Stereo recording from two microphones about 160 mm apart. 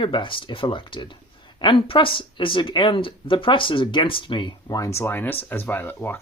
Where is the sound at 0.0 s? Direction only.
30° left (ahead or behind).